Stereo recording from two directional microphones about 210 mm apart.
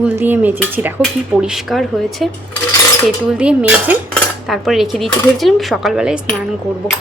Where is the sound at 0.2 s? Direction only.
10° right (ahead or behind).